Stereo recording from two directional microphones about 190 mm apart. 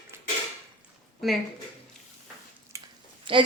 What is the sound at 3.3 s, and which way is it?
Speech, 25° right (ahead or behind).